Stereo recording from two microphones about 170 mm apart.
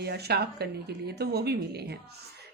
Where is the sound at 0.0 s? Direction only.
70° right (ahead or behind).